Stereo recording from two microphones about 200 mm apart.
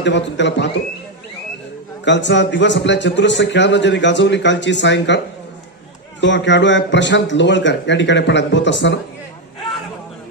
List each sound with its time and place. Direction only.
0.0 s a man's voice: 60° left (ahead or behind)
2.0 s a man's voice: 60° left (ahead or behind)
6.2 s a man's voice: 65° left (ahead or behind)